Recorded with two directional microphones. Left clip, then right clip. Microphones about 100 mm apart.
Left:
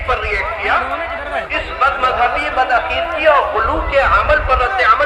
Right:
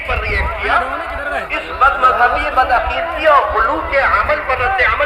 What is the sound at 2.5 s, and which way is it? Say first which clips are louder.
Speech: right 1 dB; 60° right (ahead or behind).